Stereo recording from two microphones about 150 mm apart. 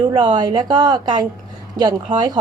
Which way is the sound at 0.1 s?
30° right (ahead or behind).